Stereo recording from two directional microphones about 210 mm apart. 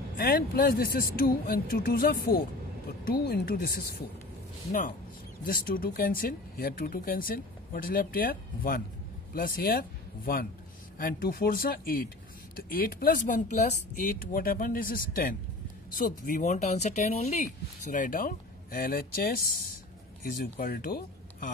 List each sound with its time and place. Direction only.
0.3 s speech: 45° left (ahead or behind)
5.4 s speech: 40° left (ahead or behind)
20.2 s speech: 45° left (ahead or behind)